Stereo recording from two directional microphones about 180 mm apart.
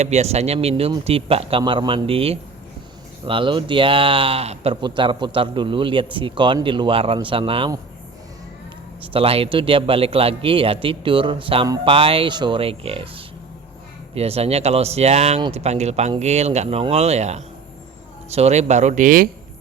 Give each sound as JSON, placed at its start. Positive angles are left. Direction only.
{"t": 0.0, "sound": "speech", "side_deg": -40}
{"t": 9.0, "sound": "speech", "side_deg": -30}